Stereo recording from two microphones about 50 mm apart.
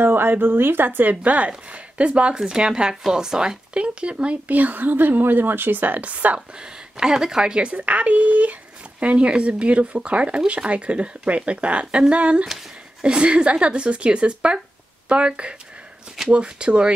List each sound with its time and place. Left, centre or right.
0.0 s speech: right
6.6 s speech: centre
7.7 s speech: right